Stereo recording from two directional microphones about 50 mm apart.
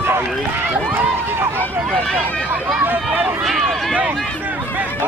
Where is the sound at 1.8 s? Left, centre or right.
Right.